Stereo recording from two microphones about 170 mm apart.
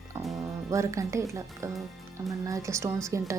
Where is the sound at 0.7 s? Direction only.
20° right (ahead or behind).